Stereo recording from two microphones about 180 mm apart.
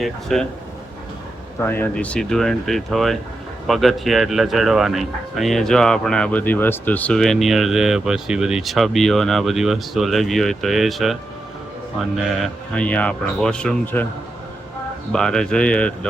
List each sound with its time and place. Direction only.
0.0 s speech: centre (ahead or behind)
1.6 s speech: 10° left (ahead or behind)
15.1 s speech: 5° left (ahead or behind)